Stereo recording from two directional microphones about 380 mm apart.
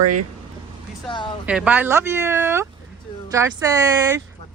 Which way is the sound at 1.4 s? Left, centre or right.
Centre.